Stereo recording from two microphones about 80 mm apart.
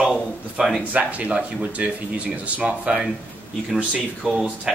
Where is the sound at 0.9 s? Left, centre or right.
Centre.